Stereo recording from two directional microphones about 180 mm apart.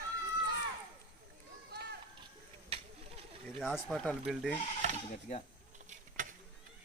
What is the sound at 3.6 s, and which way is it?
Speech, centre (ahead or behind).